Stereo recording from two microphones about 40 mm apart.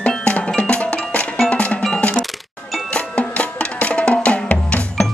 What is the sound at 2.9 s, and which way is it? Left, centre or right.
Music, left.